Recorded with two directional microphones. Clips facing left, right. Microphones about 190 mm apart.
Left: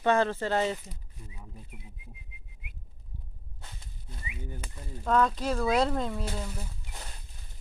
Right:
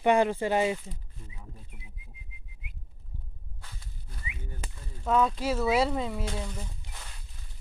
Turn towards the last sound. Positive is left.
turn(degrees=5)  # may be behind; listen again after turning